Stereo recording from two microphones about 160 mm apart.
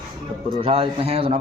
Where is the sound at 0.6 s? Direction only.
35° right (ahead or behind).